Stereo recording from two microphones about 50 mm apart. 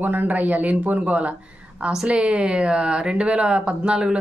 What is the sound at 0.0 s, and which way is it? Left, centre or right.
Speech, right.